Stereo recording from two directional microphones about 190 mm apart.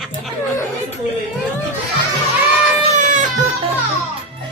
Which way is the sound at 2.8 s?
40° right (ahead or behind).